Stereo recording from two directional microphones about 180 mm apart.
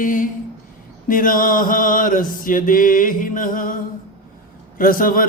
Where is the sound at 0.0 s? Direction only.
45° left (ahead or behind).